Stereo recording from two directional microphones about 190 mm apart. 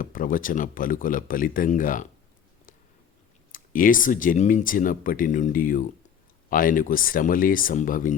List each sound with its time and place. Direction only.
0.0 s speech: 45° left (ahead or behind)
3.5 s speech: 45° left (ahead or behind)